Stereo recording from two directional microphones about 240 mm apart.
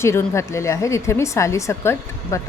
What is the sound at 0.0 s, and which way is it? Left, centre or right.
A woman's voice, centre.